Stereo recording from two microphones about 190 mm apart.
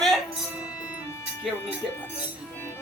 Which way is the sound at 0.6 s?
5° right (ahead or behind).